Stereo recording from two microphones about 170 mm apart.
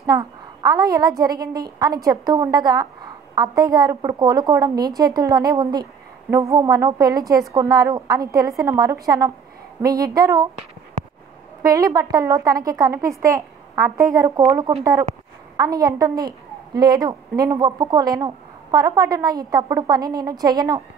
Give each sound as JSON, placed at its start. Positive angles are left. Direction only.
{"t": 0.0, "sound": "a woman's voice", "side_deg": -25}
{"t": 11.6, "sound": "a woman's voice", "side_deg": -20}